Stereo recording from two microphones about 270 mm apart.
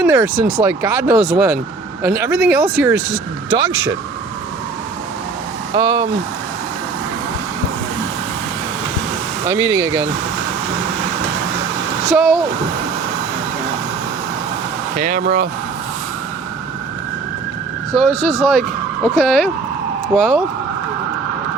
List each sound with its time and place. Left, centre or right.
0.0 s speech: centre
5.7 s speech: centre
9.5 s speech: centre
12.1 s speech: centre
14.9 s speech: right
17.9 s speech: centre